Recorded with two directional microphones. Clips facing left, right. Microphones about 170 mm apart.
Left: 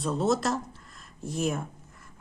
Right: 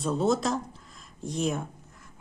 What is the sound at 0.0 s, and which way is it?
Speech, centre (ahead or behind).